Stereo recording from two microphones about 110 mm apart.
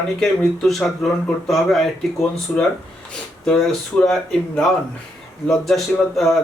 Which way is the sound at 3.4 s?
5° left (ahead or behind).